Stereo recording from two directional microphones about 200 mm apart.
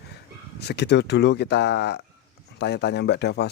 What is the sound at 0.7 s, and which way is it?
Speech, 55° left (ahead or behind).